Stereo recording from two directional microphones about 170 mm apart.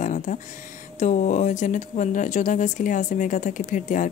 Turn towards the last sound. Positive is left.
turn(degrees=50)  # may be behind; listen again after turning